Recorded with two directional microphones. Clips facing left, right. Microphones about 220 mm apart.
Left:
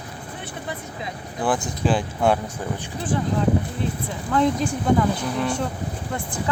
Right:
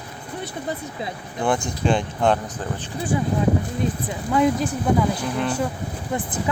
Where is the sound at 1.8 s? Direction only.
5° left (ahead or behind).